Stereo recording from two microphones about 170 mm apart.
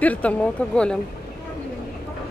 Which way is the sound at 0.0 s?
10° left (ahead or behind).